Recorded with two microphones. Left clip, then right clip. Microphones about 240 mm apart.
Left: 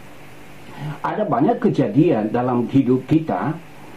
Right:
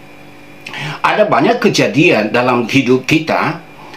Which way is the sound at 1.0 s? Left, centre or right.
Centre.